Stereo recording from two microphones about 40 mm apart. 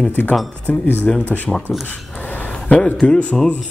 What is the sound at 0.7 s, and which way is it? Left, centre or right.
Speech, left.